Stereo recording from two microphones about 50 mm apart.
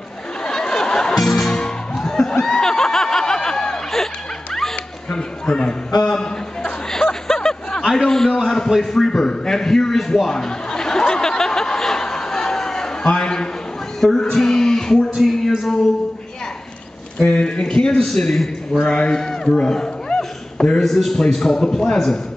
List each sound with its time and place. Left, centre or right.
0.5 s music: centre
2.4 s snicker: centre
5.1 s a sound: centre
7.9 s a man's voice: centre
9.0 s a sound: centre
13.0 s a man's voice: centre
14.0 s music: centre
17.2 s a man's voice: centre
18.8 s a sound: centre
20.8 s a man's voice: centre